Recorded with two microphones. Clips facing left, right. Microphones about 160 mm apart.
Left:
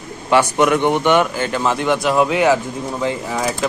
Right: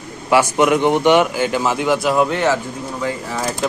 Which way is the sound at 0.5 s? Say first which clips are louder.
Right 1 dB; 15° right (ahead or behind).